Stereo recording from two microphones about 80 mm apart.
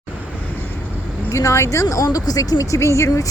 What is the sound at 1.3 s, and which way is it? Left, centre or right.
Speech, left.